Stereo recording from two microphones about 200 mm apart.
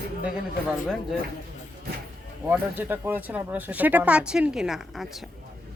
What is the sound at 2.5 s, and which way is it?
Speech, 10° right (ahead or behind).